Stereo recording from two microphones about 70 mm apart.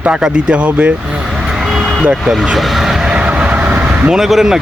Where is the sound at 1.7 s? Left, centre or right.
Centre.